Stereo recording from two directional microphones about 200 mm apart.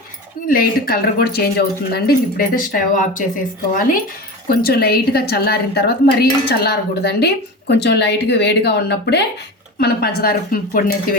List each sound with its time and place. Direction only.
0.4 s speech: 45° left (ahead or behind)
2.6 s a woman's voice: 40° left (ahead or behind)